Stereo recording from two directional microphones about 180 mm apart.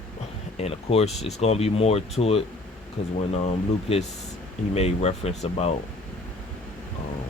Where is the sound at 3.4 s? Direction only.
35° left (ahead or behind).